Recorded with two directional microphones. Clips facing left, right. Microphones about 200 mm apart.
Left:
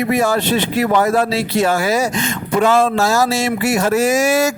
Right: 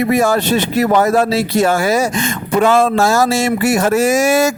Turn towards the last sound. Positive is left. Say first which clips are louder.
# right 2 dB
turn(degrees=-50)  # may be behind; listen again after turning